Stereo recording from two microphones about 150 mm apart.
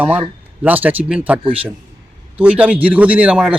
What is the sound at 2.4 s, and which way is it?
Speech, 10° right (ahead or behind).